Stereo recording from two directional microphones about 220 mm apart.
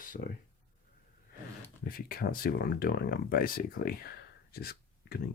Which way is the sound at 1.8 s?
40° left (ahead or behind).